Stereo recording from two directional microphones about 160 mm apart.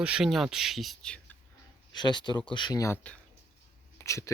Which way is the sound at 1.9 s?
30° left (ahead or behind).